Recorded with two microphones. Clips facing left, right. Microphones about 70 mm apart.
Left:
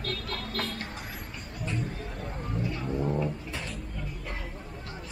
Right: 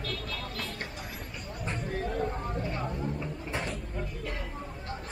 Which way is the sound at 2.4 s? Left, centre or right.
Right.